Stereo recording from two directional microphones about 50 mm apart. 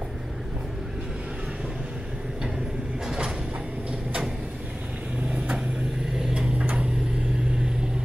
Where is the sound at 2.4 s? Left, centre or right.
Centre.